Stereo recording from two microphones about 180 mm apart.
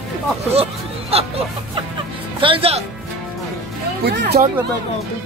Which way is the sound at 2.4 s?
30° right (ahead or behind).